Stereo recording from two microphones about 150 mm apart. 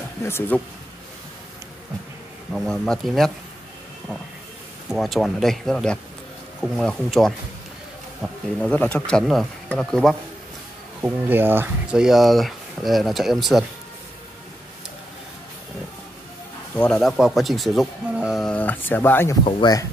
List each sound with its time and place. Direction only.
0.2 s speech: 15° left (ahead or behind)
2.5 s speech: 5° left (ahead or behind)
4.9 s speech: centre (ahead or behind)
11.0 s speech: 15° right (ahead or behind)
16.7 s speech: 5° left (ahead or behind)
19.6 s speech: 25° left (ahead or behind)